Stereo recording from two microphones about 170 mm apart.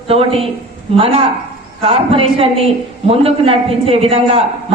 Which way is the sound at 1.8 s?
35° right (ahead or behind).